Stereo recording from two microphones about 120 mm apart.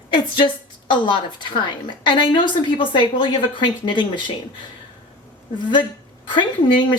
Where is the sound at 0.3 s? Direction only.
45° left (ahead or behind).